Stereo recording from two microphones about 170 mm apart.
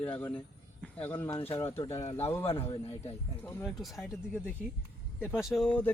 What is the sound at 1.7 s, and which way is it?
Speech, 35° left (ahead or behind).